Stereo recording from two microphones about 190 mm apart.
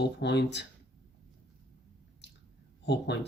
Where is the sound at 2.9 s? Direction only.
65° left (ahead or behind).